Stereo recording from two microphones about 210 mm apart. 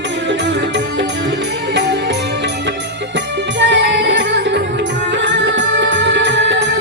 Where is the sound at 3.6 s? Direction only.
60° right (ahead or behind).